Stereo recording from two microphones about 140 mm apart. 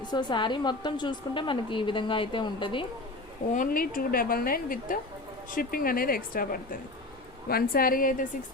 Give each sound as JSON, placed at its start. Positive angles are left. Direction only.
{"t": 0.0, "sound": "a woman's voice", "side_deg": 30}
{"t": 3.5, "sound": "a woman's voice", "side_deg": 80}